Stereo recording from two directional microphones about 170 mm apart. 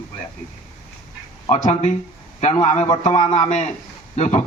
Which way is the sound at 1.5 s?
45° left (ahead or behind).